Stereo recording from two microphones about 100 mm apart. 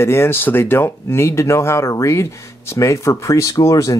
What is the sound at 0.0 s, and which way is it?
Speech, 25° left (ahead or behind).